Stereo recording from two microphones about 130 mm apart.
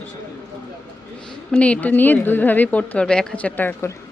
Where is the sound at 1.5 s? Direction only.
10° left (ahead or behind).